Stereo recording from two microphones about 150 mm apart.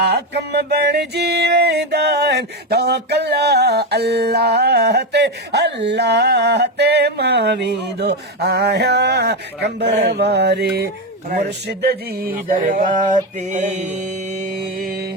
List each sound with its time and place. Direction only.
0.0 s a sound: 90° right
11.8 s speech: 90° right; by 13.1 s 60° right (ahead or behind)
13.4 s mantra: 55° right (ahead or behind)
14.8 s music: 75° right (ahead or behind)